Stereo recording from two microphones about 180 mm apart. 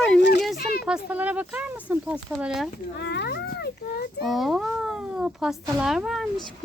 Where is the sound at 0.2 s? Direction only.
70° left (ahead or behind).